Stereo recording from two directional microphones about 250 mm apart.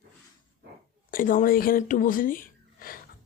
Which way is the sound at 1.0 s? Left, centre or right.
Left.